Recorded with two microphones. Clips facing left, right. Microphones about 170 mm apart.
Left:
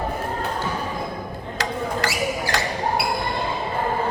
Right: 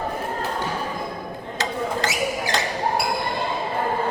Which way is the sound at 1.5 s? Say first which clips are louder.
Even; 20° right (ahead or behind).